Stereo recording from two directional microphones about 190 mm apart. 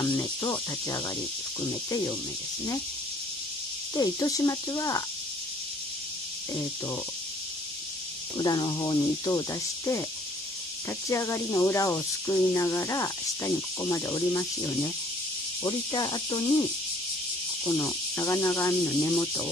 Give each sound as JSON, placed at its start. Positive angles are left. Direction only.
{"t": 0.0, "sound": "speech", "side_deg": 20}
{"t": 3.9, "sound": "speech", "side_deg": 20}
{"t": 8.4, "sound": "speech", "side_deg": 20}
{"t": 11.1, "sound": "speech", "side_deg": 15}
{"t": 17.6, "sound": "speech", "side_deg": 15}